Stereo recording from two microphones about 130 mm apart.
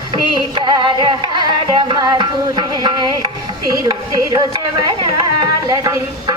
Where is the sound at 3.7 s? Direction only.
25° right (ahead or behind).